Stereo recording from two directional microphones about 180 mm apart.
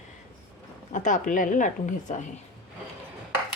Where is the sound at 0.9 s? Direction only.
45° left (ahead or behind).